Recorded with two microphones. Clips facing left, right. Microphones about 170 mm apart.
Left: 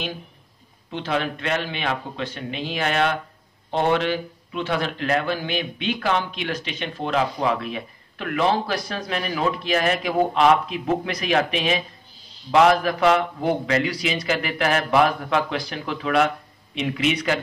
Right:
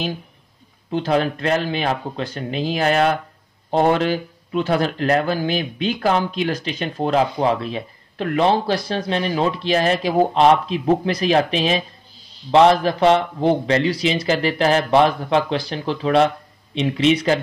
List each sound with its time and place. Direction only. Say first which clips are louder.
0.9 s speech: right 6 dB; 40° right (ahead or behind)